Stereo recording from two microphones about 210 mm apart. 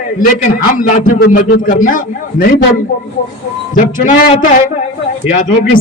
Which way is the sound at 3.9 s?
40° left (ahead or behind).